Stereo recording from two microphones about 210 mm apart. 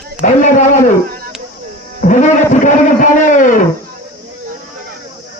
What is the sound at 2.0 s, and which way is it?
A man's voice, 35° left (ahead or behind).